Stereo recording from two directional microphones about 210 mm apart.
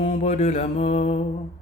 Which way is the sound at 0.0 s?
35° left (ahead or behind).